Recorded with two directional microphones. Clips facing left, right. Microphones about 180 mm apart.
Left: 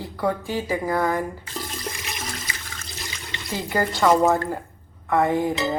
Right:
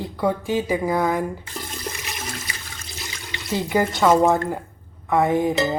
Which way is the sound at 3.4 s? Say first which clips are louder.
Right 4 dB; 10° right (ahead or behind).